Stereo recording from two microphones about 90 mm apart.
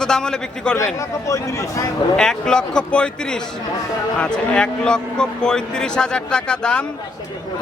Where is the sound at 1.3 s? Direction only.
35° left (ahead or behind).